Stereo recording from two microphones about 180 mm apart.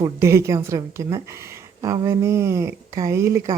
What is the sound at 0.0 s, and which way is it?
Speech, 15° right (ahead or behind).